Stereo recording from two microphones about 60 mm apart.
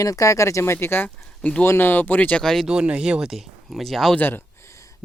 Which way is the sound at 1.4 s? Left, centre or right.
Centre.